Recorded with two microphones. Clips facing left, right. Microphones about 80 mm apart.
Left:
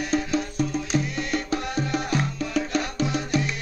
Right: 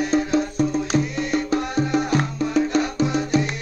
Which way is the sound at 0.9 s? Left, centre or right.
Right.